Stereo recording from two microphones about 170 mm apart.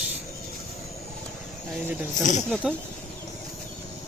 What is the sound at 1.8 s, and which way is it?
Speech, 10° right (ahead or behind).